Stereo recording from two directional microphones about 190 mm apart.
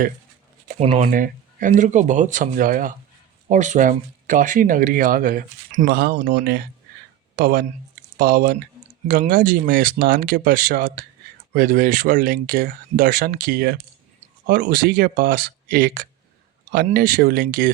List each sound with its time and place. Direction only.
0.8 s speech: 35° right (ahead or behind)
6.3 s speech: 60° right (ahead or behind)